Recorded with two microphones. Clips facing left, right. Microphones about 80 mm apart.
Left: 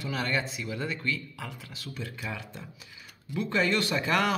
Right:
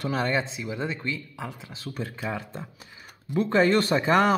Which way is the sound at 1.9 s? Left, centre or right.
Right.